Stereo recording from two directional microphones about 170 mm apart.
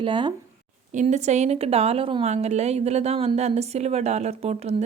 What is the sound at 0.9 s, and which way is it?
A woman's voice, 40° right (ahead or behind).